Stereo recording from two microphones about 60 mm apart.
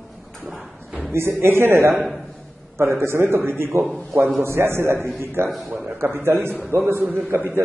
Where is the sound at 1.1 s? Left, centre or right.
Right.